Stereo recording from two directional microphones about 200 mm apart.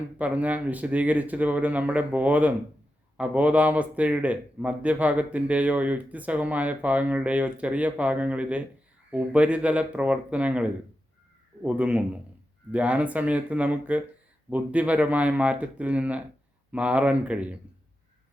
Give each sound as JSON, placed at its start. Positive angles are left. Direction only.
{"t": 0.2, "sound": "speech", "side_deg": -5}